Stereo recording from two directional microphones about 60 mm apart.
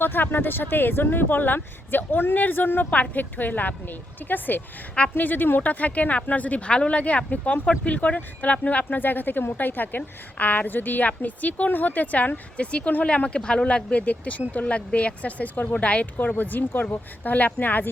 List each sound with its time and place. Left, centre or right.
0.0 s speech: left